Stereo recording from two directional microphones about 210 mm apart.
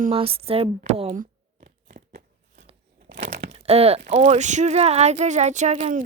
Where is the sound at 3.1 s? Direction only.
55° right (ahead or behind).